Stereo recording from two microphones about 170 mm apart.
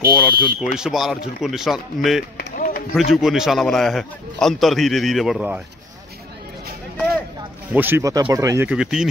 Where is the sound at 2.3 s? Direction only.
55° left (ahead or behind).